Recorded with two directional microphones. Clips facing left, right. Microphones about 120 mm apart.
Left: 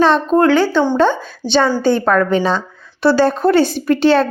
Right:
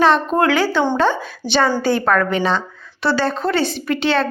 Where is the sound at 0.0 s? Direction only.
5° right (ahead or behind).